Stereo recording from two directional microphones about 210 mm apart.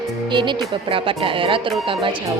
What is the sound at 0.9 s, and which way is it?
Speech, 25° right (ahead or behind).